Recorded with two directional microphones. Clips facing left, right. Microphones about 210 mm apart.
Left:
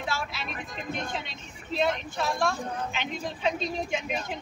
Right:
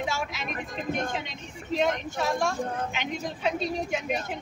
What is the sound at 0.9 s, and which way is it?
A woman's voice, 15° right (ahead or behind).